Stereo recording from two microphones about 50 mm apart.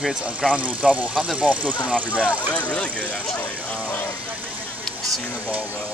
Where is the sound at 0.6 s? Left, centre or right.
Right.